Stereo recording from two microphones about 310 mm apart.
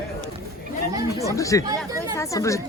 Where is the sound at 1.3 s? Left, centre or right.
Centre.